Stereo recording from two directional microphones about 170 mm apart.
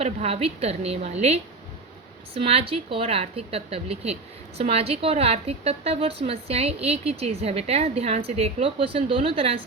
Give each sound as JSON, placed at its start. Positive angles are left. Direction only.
{"t": 0.0, "sound": "a woman's voice", "side_deg": -35}